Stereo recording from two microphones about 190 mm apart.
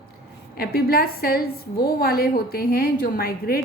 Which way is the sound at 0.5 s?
50° left (ahead or behind).